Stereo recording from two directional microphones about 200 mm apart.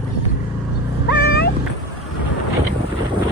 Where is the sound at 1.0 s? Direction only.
55° left (ahead or behind).